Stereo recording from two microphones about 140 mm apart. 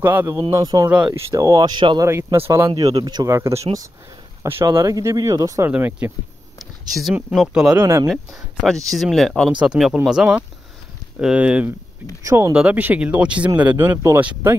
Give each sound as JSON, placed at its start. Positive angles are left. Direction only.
{"t": 0.0, "sound": "speech", "side_deg": -15}
{"t": 0.7, "sound": "speech", "side_deg": -30}
{"t": 1.8, "sound": "speech", "side_deg": -35}
{"t": 2.4, "sound": "speech", "side_deg": -15}
{"t": 2.7, "sound": "speech", "side_deg": -30}
{"t": 5.7, "sound": "speech", "side_deg": -10}
{"t": 6.9, "sound": "speech", "side_deg": 0}
{"t": 7.7, "sound": "speech", "side_deg": -20}
{"t": 8.1, "sound": "speech", "side_deg": 0}
{"t": 12.2, "sound": "speech", "side_deg": -20}
{"t": 12.5, "sound": "speech", "side_deg": -10}